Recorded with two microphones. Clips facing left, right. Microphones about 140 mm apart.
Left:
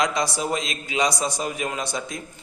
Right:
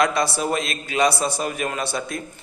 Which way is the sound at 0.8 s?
15° left (ahead or behind).